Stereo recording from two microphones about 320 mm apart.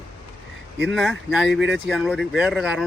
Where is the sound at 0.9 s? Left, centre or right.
Centre.